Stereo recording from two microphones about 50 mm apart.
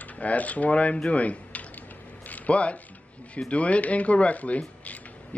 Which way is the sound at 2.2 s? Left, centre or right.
Left.